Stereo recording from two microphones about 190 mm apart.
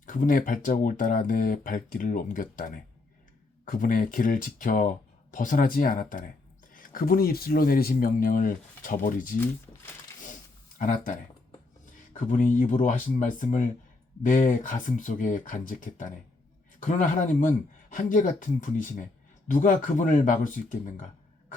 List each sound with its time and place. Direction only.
0.0 s speech: 45° left (ahead or behind)
10.8 s speech: 45° left (ahead or behind)